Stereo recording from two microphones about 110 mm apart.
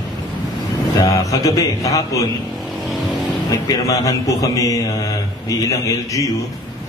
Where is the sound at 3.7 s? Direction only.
30° left (ahead or behind).